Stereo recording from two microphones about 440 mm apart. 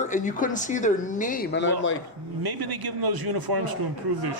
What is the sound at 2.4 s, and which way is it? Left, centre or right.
A man's voice, right.